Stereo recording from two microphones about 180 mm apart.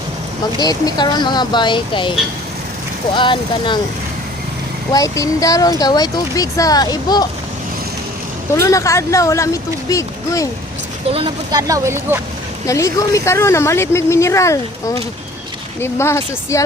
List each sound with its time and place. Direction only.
0.6 s speech: 20° left (ahead or behind)
3.2 s speech: 25° left (ahead or behind)
4.9 s speech: 20° left (ahead or behind)
8.5 s speech: 15° left (ahead or behind)
11.5 s speech: 20° right (ahead or behind)
12.6 s speech: 20° left (ahead or behind)